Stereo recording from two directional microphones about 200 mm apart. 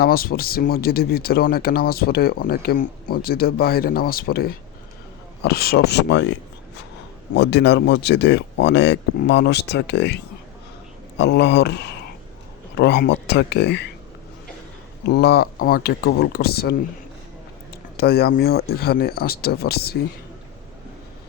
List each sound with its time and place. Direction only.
0.0 s speech: 50° left (ahead or behind)
7.3 s speech: 60° left (ahead or behind)
11.2 s speech: 60° left (ahead or behind)
15.0 s speech: 55° left (ahead or behind)
17.9 s speech: 50° left (ahead or behind)